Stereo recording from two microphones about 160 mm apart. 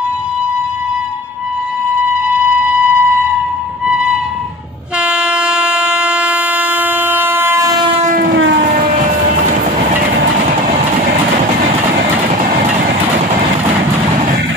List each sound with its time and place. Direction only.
2.2 s a sound: 10° right (ahead or behind)
3.8 s music: 5° right (ahead or behind)
5.0 s train: 5° right (ahead or behind)